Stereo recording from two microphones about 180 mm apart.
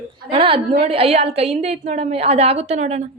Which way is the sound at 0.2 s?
30° right (ahead or behind).